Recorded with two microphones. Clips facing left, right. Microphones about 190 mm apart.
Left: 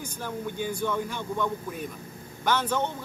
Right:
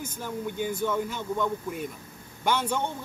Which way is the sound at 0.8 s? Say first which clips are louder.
Right 1 dB; 10° right (ahead or behind).